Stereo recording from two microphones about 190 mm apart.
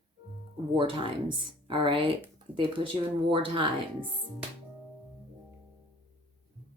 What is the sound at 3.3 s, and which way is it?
Speech, 25° right (ahead or behind).